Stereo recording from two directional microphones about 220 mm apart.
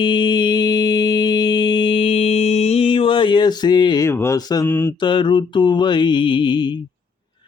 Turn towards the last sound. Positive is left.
turn(degrees=20)  # may be behind; listen again after turning